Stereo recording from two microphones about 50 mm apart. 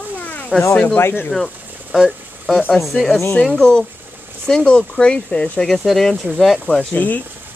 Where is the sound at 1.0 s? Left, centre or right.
Left.